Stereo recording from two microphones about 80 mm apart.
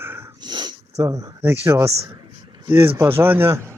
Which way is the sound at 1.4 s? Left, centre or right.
Right.